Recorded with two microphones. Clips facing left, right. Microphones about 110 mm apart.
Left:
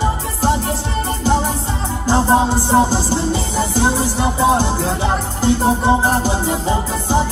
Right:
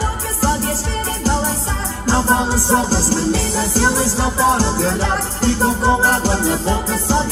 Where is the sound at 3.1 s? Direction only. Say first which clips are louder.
Right 1 dB; 15° left (ahead or behind).